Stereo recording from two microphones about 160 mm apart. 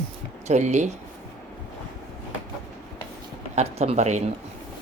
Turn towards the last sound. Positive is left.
turn(degrees=-45)  # may be behind; listen again after turning